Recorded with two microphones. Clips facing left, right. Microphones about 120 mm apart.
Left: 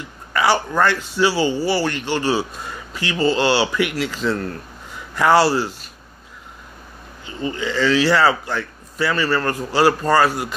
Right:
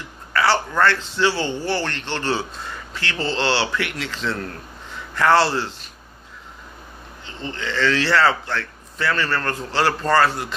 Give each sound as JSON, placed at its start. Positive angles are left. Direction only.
{"t": 0.3, "sound": "a man's voice", "side_deg": 15}
{"t": 7.2, "sound": "a man's voice", "side_deg": 10}